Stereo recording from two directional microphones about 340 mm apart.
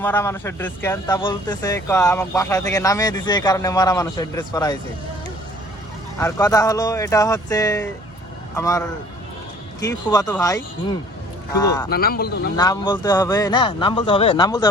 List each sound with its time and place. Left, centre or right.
0.0 s a man's voice: centre
6.1 s a man's voice: centre
9.8 s a man's voice: centre
11.9 s speech: left
12.5 s a man's voice: centre